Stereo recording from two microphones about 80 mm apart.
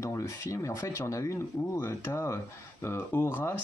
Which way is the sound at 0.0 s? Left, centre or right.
Left.